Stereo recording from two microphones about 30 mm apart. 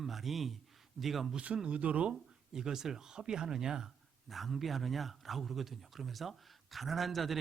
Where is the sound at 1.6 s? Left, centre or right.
Right.